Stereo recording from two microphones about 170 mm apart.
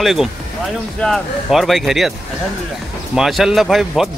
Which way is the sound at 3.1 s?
Centre (ahead or behind).